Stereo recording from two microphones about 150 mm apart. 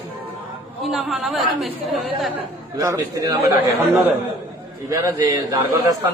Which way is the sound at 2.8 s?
20° right (ahead or behind).